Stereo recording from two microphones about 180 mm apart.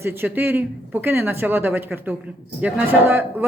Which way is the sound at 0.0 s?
10° right (ahead or behind).